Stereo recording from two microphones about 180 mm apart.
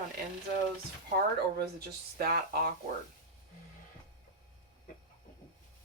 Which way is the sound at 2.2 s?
60° right (ahead or behind).